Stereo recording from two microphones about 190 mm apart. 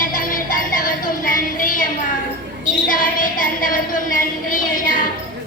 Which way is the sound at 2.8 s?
45° left (ahead or behind).